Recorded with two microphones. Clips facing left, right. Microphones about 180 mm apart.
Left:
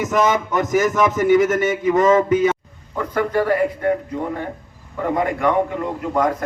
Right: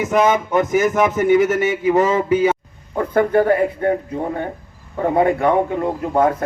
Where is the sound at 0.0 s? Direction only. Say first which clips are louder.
Right 2 dB; 55° right (ahead or behind).